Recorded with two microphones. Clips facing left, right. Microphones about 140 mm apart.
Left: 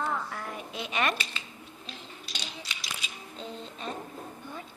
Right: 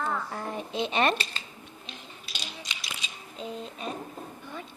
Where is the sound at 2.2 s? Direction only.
5° right (ahead or behind).